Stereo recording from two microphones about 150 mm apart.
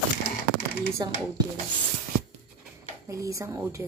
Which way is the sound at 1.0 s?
25° right (ahead or behind).